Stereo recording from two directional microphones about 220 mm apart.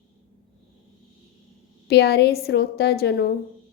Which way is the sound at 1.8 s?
45° left (ahead or behind).